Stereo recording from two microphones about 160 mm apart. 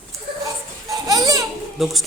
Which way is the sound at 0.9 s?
25° right (ahead or behind).